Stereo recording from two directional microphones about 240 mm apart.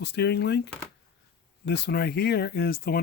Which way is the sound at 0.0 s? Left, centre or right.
Left.